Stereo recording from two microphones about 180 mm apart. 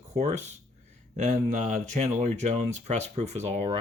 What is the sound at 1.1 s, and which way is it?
Speech, 40° right (ahead or behind).